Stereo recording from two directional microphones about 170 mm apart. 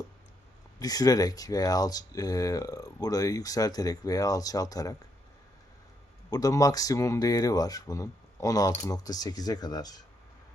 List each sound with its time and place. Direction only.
0.8 s speech: 20° left (ahead or behind)
6.3 s speech: 20° left (ahead or behind)